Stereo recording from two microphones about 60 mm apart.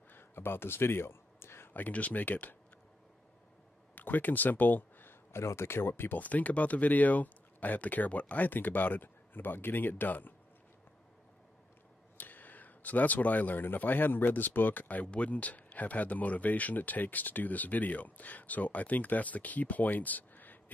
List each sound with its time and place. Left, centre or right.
0.1 s speech: left
3.9 s a sound: left
5.4 s speech: left
12.2 s speech: left